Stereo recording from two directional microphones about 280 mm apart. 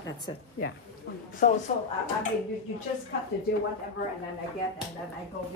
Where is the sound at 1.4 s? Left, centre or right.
Left.